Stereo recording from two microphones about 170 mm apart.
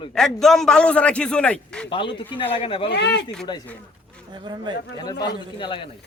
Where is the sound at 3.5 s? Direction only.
25° left (ahead or behind).